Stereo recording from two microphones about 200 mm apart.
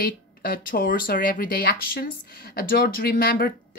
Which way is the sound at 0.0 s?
45° left (ahead or behind).